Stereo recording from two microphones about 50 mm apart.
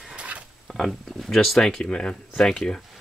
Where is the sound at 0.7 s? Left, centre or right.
Centre.